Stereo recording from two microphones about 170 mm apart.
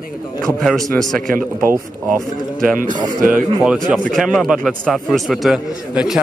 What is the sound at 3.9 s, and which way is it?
A man's voice, centre (ahead or behind).